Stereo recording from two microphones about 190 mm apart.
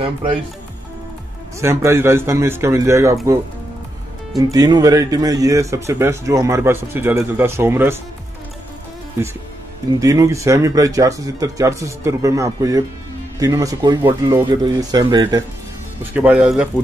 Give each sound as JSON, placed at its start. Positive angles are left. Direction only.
{"t": 0.0, "sound": "speech", "side_deg": -30}
{"t": 1.6, "sound": "speech", "side_deg": -15}
{"t": 4.4, "sound": "speech", "side_deg": -20}
{"t": 9.8, "sound": "speech", "side_deg": -15}